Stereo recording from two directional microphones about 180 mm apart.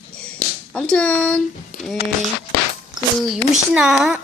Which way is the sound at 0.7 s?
5° left (ahead or behind).